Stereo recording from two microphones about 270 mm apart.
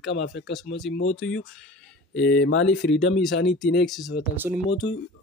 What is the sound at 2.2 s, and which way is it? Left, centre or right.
Speech, left.